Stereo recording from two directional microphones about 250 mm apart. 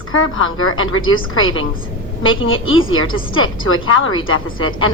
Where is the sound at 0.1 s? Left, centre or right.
Left.